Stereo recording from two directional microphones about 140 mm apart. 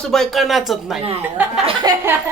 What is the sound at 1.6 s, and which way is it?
Speech, 30° right (ahead or behind).